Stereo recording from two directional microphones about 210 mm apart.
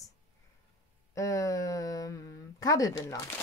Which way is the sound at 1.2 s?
15° left (ahead or behind).